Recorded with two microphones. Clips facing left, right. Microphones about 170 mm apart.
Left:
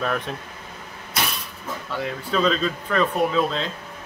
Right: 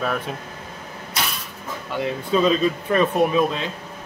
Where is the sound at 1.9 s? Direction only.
20° right (ahead or behind).